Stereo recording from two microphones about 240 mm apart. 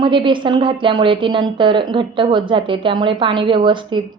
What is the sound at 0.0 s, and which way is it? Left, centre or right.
A woman's voice, centre.